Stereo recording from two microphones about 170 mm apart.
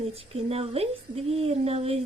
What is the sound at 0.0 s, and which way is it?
Speech, 35° right (ahead or behind).